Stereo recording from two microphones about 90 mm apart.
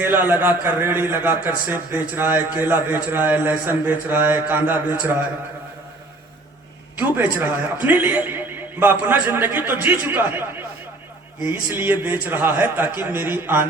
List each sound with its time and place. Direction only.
0.0 s speech: 20° right (ahead or behind)
6.9 s speech: 20° right (ahead or behind)